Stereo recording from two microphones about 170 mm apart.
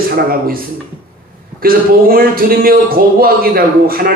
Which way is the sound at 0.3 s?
60° right (ahead or behind).